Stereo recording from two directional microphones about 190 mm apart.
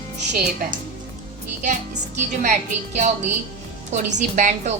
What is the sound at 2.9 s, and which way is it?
Speech, 35° right (ahead or behind).